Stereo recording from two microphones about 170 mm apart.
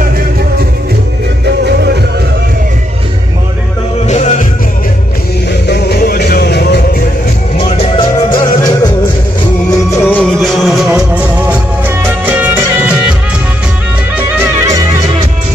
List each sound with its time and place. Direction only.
4.1 s music: 45° left (ahead or behind)
5.7 s music: 70° left (ahead or behind)
7.5 s music: 35° left (ahead or behind)
9.7 s music: 15° left (ahead or behind)
10.4 s music: centre (ahead or behind)
14.3 s music: 15° right (ahead or behind)